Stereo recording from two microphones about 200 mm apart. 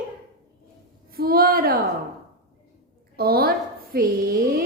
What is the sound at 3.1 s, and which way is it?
A woman's voice, 50° right (ahead or behind).